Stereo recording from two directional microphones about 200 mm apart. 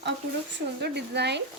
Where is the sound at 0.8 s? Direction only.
55° right (ahead or behind).